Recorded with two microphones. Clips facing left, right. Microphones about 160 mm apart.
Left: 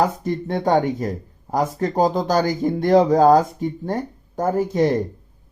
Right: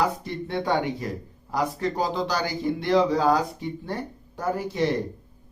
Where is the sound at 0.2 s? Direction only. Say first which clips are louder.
Left 6 dB; 45° left (ahead or behind).